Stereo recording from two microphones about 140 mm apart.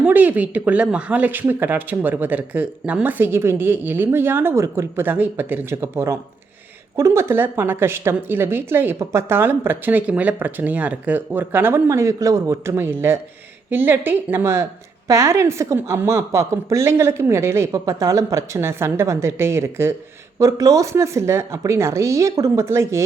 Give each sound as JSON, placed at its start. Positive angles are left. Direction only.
{"t": 0.0, "sound": "a woman's voice", "side_deg": -10}